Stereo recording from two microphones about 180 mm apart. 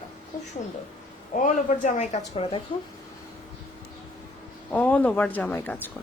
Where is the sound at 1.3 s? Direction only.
45° left (ahead or behind).